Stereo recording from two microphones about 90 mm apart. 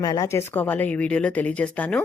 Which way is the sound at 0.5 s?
20° left (ahead or behind).